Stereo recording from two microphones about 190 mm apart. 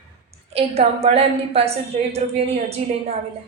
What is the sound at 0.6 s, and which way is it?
A woman's voice, 30° right (ahead or behind).